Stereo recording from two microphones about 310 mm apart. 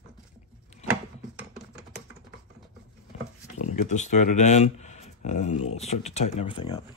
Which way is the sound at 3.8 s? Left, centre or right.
Left.